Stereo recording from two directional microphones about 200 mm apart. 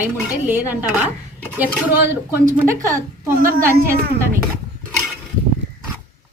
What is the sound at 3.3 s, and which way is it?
Speech, 45° right (ahead or behind).